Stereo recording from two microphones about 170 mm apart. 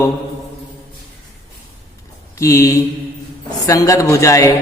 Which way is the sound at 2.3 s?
20° left (ahead or behind).